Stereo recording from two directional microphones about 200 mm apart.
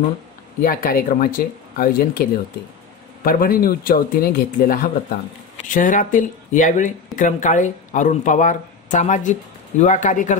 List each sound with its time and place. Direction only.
0.6 s speech: 45° left (ahead or behind)
3.3 s speech: 45° left (ahead or behind)